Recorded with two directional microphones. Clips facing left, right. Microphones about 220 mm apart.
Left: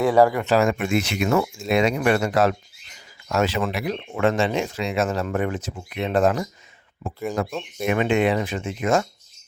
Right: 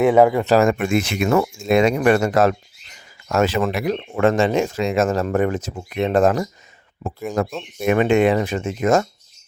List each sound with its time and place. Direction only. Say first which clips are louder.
0.0 s speech: right 3 dB; 20° right (ahead or behind)
0.4 s speech: right 4 dB; 45° right (ahead or behind)